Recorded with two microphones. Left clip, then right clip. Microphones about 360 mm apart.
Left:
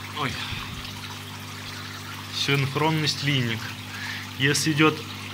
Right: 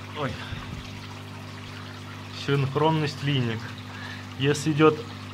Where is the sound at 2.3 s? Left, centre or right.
Centre.